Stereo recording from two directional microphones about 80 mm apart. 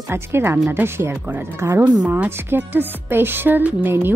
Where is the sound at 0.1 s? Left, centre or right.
Right.